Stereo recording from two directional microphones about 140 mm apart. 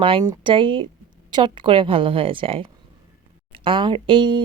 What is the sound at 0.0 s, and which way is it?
Speech, 35° right (ahead or behind).